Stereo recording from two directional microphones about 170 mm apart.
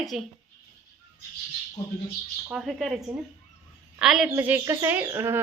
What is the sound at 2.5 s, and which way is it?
A woman's voice, centre (ahead or behind).